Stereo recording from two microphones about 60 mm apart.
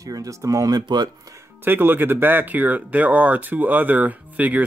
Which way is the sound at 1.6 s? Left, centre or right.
Right.